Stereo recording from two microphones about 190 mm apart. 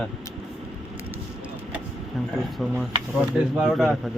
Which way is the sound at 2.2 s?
Centre (ahead or behind).